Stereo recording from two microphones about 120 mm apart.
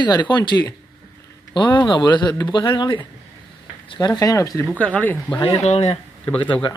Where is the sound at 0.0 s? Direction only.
40° left (ahead or behind).